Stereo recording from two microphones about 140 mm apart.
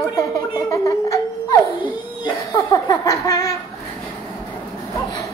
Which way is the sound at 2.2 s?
30° left (ahead or behind).